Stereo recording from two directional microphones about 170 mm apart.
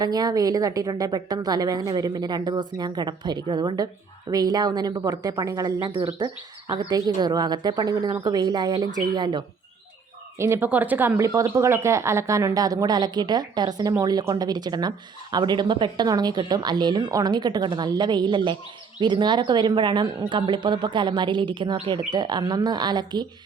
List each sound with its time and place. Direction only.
0.0 s speech: 25° right (ahead or behind)
10.3 s speech: 15° right (ahead or behind)